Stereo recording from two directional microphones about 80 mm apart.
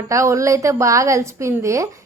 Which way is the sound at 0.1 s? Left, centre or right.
Right.